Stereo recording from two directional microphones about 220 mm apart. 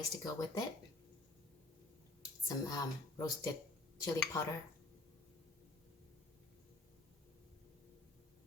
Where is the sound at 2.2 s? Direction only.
15° left (ahead or behind).